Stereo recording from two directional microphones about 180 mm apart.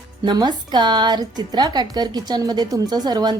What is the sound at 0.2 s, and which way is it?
A woman's voice, 25° right (ahead or behind).